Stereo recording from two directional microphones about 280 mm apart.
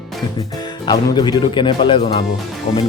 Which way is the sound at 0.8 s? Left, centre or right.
Centre.